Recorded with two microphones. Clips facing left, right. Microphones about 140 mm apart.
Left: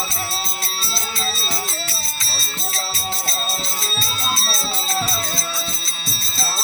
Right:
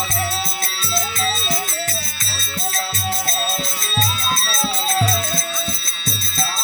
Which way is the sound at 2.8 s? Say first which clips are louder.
Right 2 dB; 35° left (ahead or behind).